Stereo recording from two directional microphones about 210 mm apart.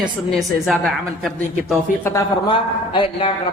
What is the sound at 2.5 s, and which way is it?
Speech, 25° left (ahead or behind).